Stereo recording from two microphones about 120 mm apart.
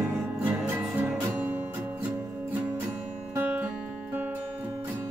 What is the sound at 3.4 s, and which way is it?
Music, 15° right (ahead or behind).